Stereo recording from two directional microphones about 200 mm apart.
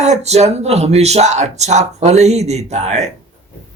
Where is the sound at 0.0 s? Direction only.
35° right (ahead or behind).